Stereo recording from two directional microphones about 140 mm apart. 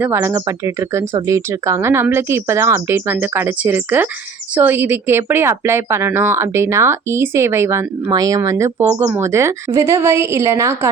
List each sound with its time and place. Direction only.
0.0 s a woman's voice: 20° right (ahead or behind)